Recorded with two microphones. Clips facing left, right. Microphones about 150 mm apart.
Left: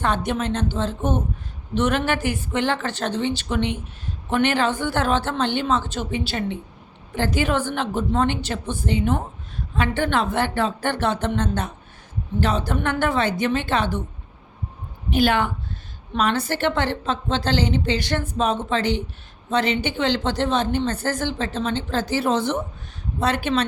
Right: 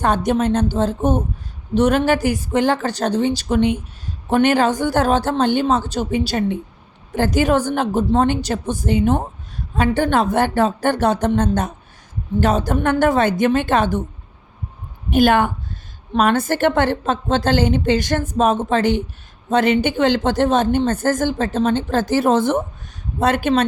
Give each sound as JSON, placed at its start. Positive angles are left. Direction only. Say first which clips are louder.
{"t": 0.0, "sound": "a woman's voice", "louder": "right 6 dB", "side_deg": -45}
{"t": 15.1, "sound": "a woman's voice", "louder": "right 5 dB", "side_deg": -45}